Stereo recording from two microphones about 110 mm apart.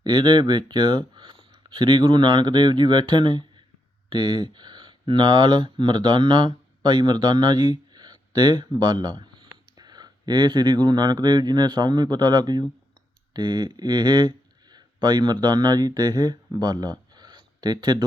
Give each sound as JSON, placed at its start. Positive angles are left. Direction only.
{"t": 0.0, "sound": "speech", "side_deg": -45}